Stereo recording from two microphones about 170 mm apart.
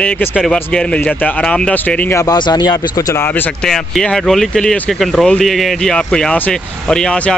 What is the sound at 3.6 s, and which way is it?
Speech, centre (ahead or behind).